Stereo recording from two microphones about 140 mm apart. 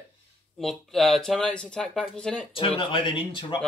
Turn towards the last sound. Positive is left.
turn(degrees=35)  # may be behind; listen again after turning